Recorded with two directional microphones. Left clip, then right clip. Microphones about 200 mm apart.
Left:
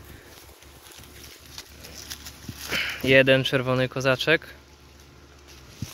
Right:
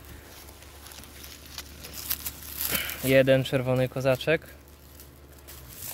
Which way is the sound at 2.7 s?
5° right (ahead or behind).